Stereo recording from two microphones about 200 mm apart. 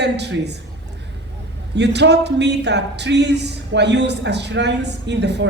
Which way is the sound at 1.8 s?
60° right (ahead or behind).